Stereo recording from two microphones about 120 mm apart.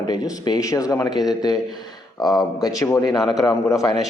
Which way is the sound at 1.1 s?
5° right (ahead or behind).